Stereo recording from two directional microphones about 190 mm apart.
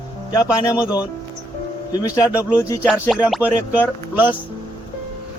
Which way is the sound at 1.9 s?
20° left (ahead or behind).